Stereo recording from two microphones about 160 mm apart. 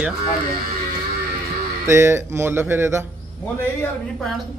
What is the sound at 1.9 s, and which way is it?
A man's voice, 15° right (ahead or behind).